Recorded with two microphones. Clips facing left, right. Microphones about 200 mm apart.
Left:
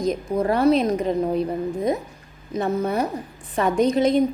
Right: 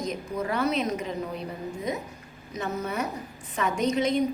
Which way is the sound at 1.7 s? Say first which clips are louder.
Left 7 dB; 55° left (ahead or behind).